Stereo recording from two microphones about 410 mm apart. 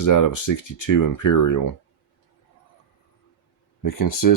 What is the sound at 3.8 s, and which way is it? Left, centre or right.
Speech, left.